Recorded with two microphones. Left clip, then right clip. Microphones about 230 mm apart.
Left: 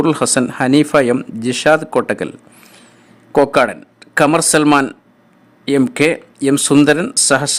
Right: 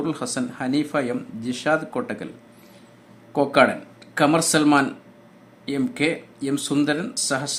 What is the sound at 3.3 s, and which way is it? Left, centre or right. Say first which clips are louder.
Speech: left 6 dB; left.